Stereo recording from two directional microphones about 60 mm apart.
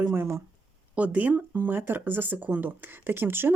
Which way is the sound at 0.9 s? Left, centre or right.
Right.